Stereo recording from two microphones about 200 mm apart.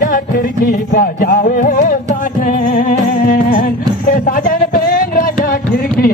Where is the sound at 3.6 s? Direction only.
45° left (ahead or behind).